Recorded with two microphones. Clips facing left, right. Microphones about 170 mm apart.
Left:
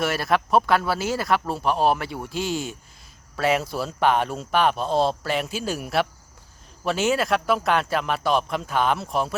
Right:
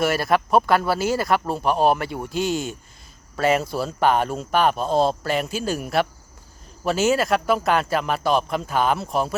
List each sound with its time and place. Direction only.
0.0 s speech: centre (ahead or behind)